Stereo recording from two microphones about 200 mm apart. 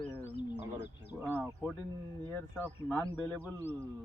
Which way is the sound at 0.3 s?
55° left (ahead or behind).